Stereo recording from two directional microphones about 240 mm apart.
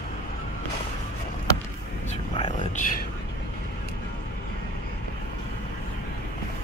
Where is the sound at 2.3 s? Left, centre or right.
Left.